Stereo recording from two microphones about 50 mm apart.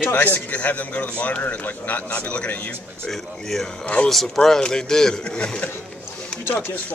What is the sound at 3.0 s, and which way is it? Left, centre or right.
Speech, centre.